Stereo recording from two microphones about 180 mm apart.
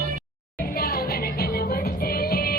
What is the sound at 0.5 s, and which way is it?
Music, 55° left (ahead or behind).